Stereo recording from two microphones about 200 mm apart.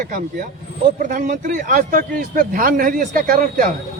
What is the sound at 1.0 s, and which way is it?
Speech, 40° right (ahead or behind).